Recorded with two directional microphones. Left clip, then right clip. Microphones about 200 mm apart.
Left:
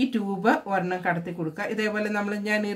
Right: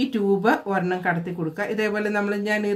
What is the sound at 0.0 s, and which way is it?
Speech, centre (ahead or behind).